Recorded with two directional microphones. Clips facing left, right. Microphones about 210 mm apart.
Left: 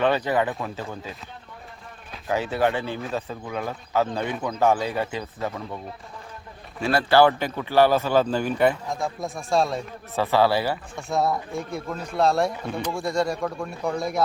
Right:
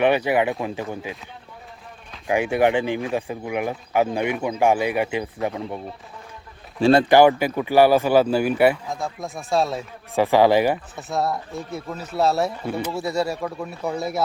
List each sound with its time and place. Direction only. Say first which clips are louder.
0.0 s speech: right 3 dB; 15° right (ahead or behind)
2.2 s speech: right 4 dB; 15° right (ahead or behind)
7.1 s speech: right 3 dB; 15° right (ahead or behind)
10.2 s speech: right 5 dB; 15° right (ahead or behind)
10.9 s speech: left 1 dB; centre (ahead or behind)